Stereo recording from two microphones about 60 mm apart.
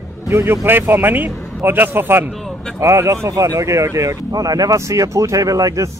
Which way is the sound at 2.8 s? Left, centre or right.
Right.